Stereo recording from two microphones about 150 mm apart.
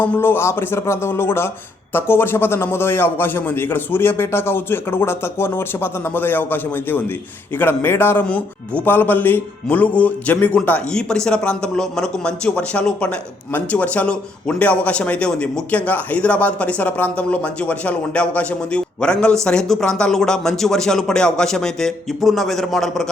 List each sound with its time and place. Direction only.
0.0 s speech: 15° left (ahead or behind)